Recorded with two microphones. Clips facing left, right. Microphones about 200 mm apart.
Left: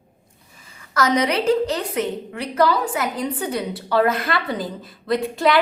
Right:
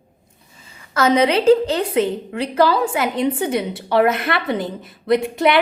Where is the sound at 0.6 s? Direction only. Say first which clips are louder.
Right 3 dB; 25° right (ahead or behind).